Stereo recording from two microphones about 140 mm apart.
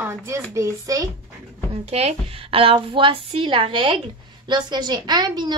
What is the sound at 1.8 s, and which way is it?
A woman's voice, 50° right (ahead or behind).